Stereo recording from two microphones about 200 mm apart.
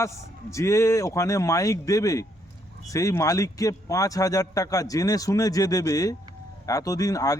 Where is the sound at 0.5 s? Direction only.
15° left (ahead or behind).